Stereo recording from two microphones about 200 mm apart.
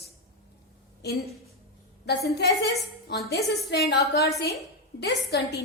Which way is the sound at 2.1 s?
55° left (ahead or behind).